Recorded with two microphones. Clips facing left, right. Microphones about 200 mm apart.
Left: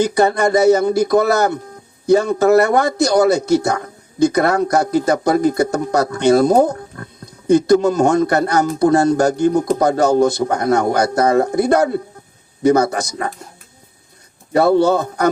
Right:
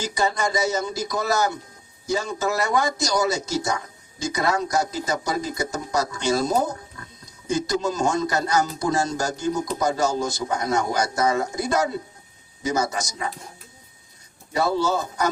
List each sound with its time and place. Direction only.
0.0 s speech: 60° left (ahead or behind)
14.5 s speech: 60° left (ahead or behind)